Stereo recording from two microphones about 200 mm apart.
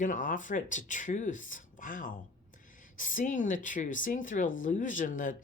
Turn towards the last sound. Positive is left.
turn(degrees=40)  # may be behind; listen again after turning